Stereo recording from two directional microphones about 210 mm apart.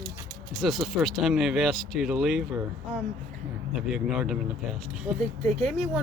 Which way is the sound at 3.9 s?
Centre (ahead or behind).